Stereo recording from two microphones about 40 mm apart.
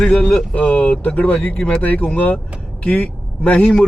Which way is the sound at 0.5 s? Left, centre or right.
Left.